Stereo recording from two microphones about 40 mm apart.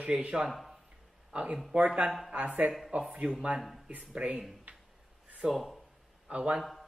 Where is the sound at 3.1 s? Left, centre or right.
Right.